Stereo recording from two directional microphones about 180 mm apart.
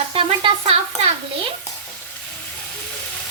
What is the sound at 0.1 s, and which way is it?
Sizzle, 30° right (ahead or behind).